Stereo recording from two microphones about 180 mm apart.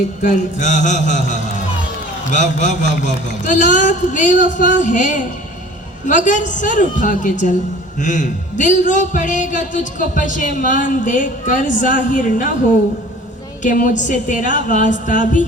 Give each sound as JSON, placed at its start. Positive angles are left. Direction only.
{"t": 0.2, "sound": "a man's voice", "side_deg": 45}
{"t": 13.6, "sound": "a man's voice", "side_deg": 45}